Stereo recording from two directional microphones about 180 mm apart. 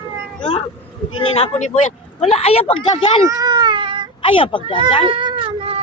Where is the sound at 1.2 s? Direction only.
35° left (ahead or behind).